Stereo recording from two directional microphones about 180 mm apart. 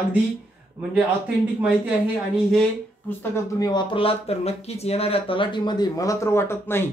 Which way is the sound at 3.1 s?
10° left (ahead or behind).